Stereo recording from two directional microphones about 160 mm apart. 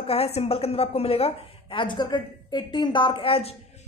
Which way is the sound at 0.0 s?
40° left (ahead or behind).